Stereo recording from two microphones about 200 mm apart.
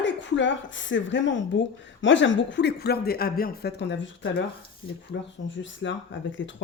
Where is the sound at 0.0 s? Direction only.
65° left (ahead or behind).